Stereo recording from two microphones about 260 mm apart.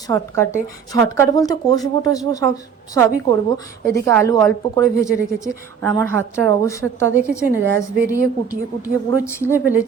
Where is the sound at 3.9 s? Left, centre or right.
Centre.